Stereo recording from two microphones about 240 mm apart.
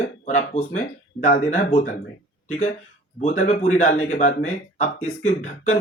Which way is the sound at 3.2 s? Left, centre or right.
Left.